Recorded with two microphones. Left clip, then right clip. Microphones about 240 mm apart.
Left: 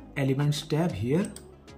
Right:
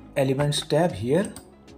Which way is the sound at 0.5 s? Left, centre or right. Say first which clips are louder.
Right 7 dB; centre.